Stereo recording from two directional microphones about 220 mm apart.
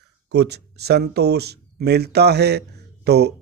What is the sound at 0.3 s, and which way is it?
Speech, 50° right (ahead or behind).